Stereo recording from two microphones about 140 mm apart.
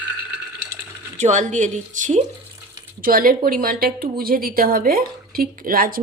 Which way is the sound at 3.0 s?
90° right.